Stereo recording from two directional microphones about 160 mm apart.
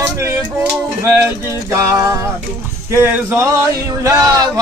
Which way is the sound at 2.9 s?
15° right (ahead or behind).